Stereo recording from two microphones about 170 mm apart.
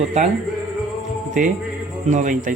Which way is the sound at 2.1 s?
45° right (ahead or behind).